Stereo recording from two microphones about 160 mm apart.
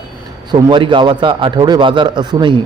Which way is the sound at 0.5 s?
30° right (ahead or behind).